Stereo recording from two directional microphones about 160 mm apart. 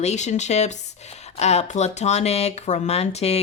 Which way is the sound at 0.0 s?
45° left (ahead or behind).